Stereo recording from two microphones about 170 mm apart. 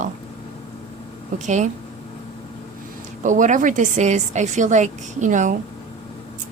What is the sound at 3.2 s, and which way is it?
A woman's voice, 45° right (ahead or behind).